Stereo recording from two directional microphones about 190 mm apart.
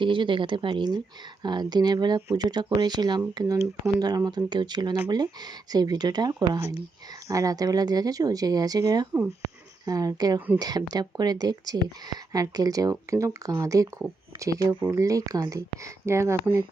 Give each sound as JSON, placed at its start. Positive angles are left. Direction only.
{"t": 0.0, "sound": "speech", "side_deg": -25}